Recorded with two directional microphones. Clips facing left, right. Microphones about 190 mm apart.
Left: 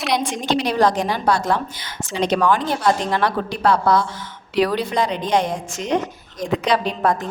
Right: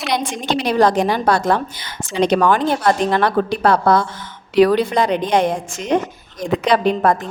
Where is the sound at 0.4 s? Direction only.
55° right (ahead or behind).